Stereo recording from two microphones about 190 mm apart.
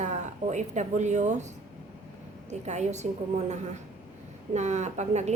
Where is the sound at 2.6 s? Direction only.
35° right (ahead or behind).